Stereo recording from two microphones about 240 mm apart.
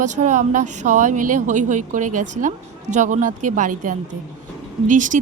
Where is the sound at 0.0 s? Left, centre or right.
Right.